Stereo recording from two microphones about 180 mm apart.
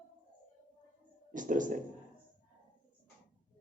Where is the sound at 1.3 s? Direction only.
45° right (ahead or behind).